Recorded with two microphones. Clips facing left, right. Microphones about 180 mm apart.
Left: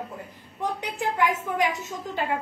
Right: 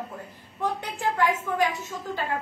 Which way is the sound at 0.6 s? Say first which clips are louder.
Even; 15° left (ahead or behind).